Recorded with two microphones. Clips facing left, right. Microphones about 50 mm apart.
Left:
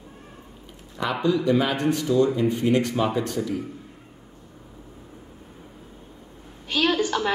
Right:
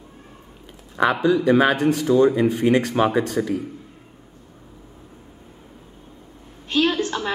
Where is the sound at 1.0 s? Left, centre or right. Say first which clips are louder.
Right 8 dB; right.